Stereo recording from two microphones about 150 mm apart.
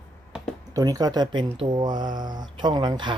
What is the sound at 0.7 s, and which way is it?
Speech, 25° right (ahead or behind).